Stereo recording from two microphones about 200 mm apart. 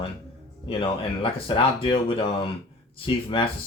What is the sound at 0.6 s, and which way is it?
Speech, 25° left (ahead or behind).